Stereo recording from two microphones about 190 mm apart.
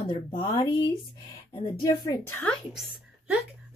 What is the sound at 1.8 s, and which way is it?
Speech, 15° left (ahead or behind).